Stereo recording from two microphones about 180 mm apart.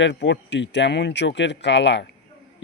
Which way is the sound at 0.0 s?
85° left.